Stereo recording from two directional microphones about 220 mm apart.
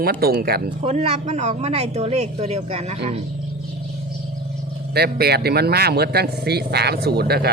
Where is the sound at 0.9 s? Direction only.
30° right (ahead or behind).